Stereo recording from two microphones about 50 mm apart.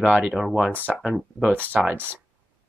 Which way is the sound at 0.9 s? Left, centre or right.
Centre.